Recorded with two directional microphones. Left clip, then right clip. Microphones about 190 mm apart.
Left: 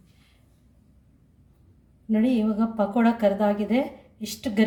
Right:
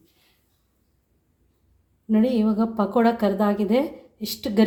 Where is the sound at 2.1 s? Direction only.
40° right (ahead or behind).